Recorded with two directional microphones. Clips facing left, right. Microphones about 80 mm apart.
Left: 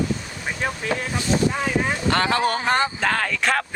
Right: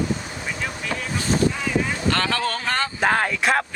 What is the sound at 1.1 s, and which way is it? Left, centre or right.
Speech, right.